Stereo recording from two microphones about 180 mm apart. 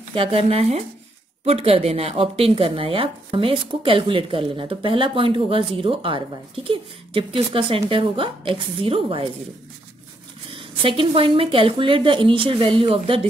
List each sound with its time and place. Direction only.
0.1 s a woman's voice: 30° right (ahead or behind)
10.8 s speech: 30° right (ahead or behind)